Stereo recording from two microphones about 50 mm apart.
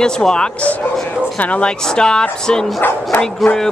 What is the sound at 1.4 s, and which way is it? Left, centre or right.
Speech, left.